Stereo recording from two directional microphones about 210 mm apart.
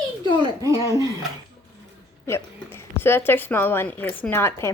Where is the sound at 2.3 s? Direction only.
10° left (ahead or behind).